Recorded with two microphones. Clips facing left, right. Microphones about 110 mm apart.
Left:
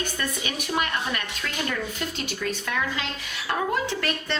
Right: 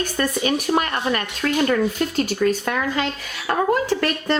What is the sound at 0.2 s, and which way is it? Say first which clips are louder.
A woman's voice: right 9 dB; 45° right (ahead or behind).